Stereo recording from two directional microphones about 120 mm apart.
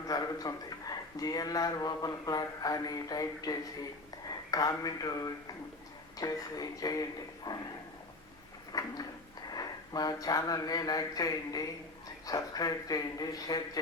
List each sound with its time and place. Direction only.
0.1 s speech: 30° left (ahead or behind)
8.7 s a sound: 35° left (ahead or behind)
9.5 s speech: 35° left (ahead or behind)